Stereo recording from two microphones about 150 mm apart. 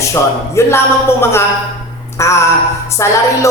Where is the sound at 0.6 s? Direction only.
20° left (ahead or behind).